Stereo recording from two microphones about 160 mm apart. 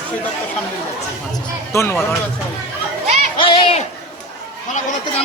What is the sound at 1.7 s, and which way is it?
Speech, 15° left (ahead or behind).